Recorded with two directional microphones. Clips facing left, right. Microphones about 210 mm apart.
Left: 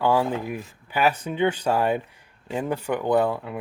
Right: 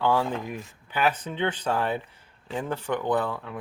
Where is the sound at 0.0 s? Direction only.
10° left (ahead or behind).